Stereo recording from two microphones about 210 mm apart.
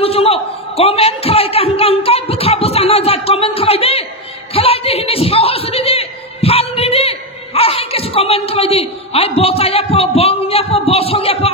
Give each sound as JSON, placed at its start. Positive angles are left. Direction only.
{"t": 0.0, "sound": "a man's voice", "side_deg": 30}